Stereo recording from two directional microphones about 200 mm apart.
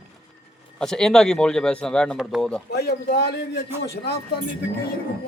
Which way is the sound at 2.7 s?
55° left (ahead or behind).